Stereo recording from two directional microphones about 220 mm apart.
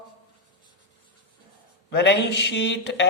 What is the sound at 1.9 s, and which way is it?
Speech, 50° left (ahead or behind).